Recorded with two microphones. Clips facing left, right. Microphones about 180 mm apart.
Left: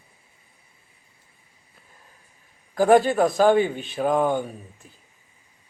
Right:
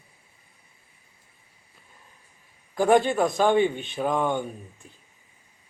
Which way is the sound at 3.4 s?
40° left (ahead or behind).